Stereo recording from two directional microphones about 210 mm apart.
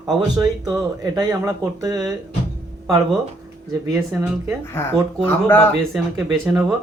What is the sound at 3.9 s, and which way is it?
Speech, 10° right (ahead or behind).